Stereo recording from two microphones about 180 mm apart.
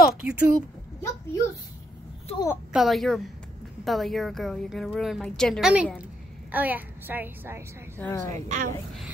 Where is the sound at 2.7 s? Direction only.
Centre (ahead or behind).